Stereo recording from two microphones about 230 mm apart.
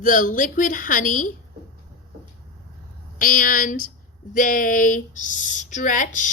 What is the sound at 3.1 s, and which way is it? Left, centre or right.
A woman's voice, left.